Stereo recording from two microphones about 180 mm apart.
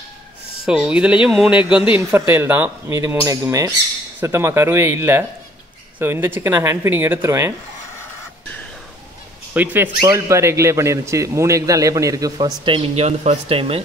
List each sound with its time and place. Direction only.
0.7 s speech: 5° right (ahead or behind)
9.5 s speech: 10° right (ahead or behind); by 13.8 s 35° right (ahead or behind)